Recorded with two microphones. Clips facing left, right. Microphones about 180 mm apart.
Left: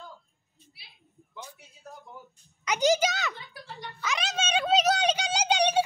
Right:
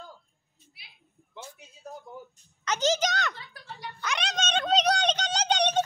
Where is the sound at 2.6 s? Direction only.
10° left (ahead or behind).